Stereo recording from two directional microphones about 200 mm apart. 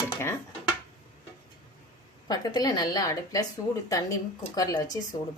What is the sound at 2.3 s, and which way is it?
Speech, 20° left (ahead or behind).